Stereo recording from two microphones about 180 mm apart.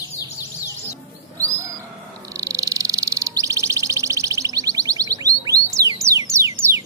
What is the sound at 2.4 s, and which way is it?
Bird, 20° right (ahead or behind).